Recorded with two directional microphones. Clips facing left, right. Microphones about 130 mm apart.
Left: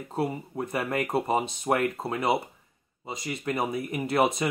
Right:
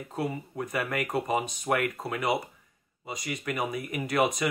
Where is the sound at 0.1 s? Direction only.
30° left (ahead or behind).